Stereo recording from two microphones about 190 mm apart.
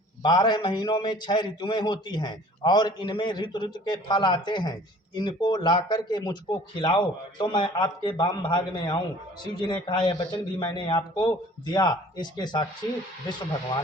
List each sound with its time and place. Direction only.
0.2 s a man's voice: 20° left (ahead or behind)